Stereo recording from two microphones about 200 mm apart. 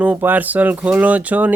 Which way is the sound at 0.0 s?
10° right (ahead or behind).